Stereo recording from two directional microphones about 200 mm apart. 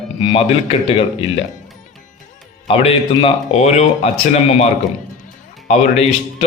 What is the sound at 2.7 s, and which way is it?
Speech, 25° left (ahead or behind).